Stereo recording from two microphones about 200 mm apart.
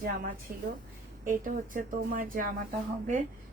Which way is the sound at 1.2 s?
40° right (ahead or behind).